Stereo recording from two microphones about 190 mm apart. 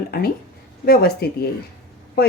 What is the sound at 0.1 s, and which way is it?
A woman's voice, 55° left (ahead or behind).